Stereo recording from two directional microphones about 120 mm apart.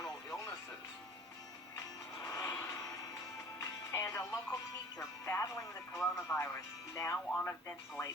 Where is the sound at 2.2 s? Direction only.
25° left (ahead or behind).